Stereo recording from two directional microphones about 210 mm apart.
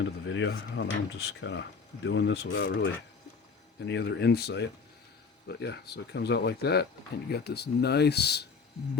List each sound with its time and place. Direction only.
0.0 s speech: 60° left (ahead or behind)